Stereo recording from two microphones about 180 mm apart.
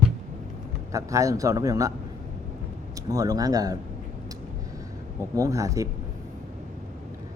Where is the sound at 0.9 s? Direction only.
20° right (ahead or behind).